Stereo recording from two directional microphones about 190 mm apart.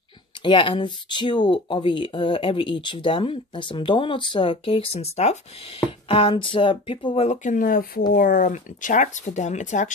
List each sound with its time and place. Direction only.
0.4 s speech: 25° left (ahead or behind)
7.2 s speech: 45° left (ahead or behind)